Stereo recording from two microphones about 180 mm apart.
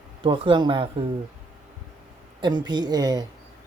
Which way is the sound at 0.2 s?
30° right (ahead or behind).